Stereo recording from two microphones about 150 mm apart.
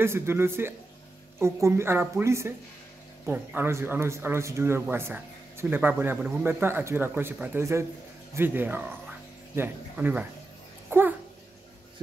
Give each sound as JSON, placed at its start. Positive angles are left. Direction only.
{"t": 0.0, "sound": "a man's voice", "side_deg": -15}
{"t": 10.9, "sound": "dog", "side_deg": -15}